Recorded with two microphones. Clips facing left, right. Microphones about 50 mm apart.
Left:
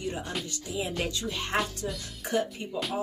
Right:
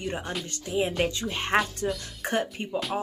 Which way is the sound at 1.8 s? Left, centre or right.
Right.